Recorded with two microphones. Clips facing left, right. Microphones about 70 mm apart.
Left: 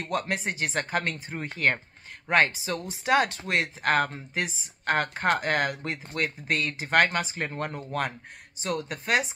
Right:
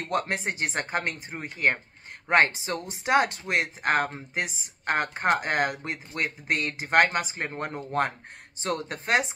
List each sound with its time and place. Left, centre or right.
0.0 s speech: right
2.2 s speech: right